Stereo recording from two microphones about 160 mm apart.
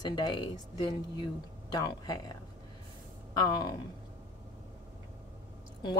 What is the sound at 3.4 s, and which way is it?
Speech, 25° left (ahead or behind).